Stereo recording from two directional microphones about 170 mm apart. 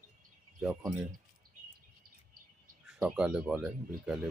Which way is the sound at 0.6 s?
Centre (ahead or behind).